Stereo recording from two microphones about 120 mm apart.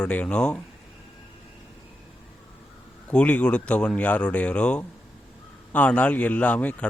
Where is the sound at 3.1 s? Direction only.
10° left (ahead or behind).